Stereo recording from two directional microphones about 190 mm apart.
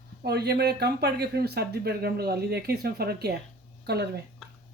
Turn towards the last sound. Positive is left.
turn(degrees=-60)  # may be behind; listen again after turning